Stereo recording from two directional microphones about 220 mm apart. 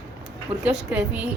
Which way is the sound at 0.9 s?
5° right (ahead or behind).